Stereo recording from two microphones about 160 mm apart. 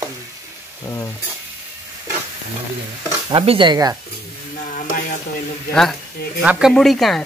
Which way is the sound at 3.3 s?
35° right (ahead or behind).